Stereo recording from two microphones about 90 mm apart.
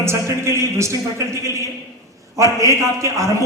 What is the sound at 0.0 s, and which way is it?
A man's voice, 30° right (ahead or behind).